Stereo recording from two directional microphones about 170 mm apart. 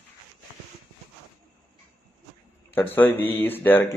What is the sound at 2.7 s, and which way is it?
Speech, 10° left (ahead or behind).